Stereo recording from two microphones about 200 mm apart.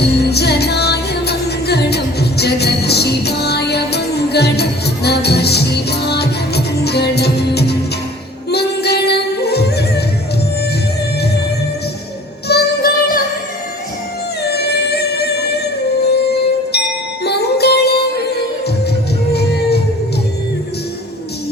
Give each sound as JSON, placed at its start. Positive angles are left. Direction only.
{"t": 0.2, "sound": "music", "side_deg": 55}
{"t": 12.5, "sound": "music", "side_deg": 50}
{"t": 14.4, "sound": "music", "side_deg": 55}
{"t": 19.3, "sound": "music", "side_deg": 55}